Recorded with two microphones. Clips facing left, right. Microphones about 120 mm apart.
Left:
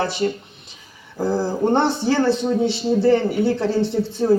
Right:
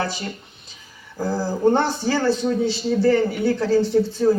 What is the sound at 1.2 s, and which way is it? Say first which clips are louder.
A man's voice: even; 25° left (ahead or behind).